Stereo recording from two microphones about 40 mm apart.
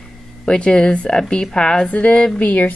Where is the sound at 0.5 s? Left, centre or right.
Left.